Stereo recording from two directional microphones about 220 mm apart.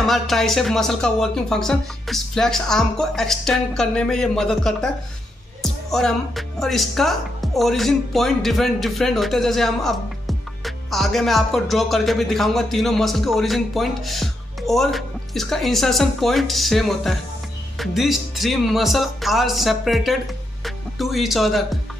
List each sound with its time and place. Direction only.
0.0 s a woman's voice: centre (ahead or behind)